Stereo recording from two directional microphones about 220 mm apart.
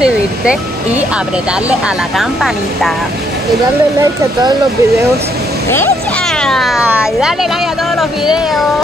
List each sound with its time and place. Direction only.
0.0 s speech: 5° right (ahead or behind)
4.0 s speech: 20° right (ahead or behind)
5.7 s speech: 10° left (ahead or behind)